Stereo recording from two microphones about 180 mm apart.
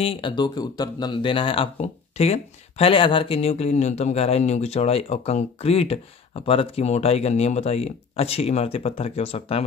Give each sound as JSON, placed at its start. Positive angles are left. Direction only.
{"t": 0.0, "sound": "speech", "side_deg": 30}